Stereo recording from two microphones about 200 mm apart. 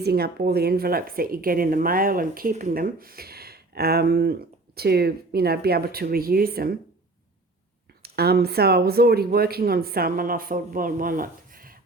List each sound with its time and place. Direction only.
0.0 s speech: 50° right (ahead or behind)
8.0 s speech: 50° right (ahead or behind)